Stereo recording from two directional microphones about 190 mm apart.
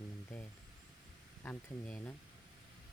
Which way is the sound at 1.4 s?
5° left (ahead or behind).